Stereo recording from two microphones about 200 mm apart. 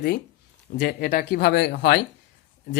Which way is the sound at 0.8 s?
45° left (ahead or behind).